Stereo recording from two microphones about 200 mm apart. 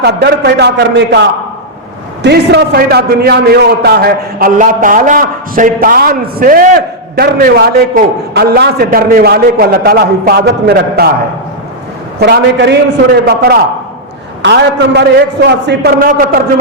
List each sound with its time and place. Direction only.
0.0 s a man's voice: 55° right (ahead or behind)
12.2 s a man's voice: 55° right (ahead or behind)